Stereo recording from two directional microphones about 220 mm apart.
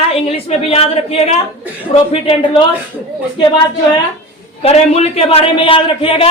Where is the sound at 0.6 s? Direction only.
25° left (ahead or behind).